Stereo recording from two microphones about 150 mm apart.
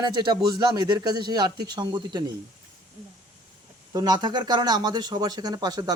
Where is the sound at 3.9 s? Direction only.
25° right (ahead or behind).